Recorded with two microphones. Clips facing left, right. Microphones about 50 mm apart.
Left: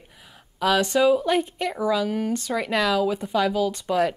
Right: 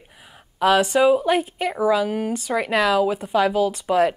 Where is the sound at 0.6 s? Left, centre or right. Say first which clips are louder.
Right 3 dB; centre.